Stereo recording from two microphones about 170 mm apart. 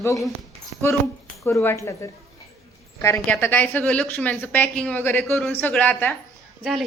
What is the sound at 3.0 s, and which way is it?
A woman's voice, 15° left (ahead or behind).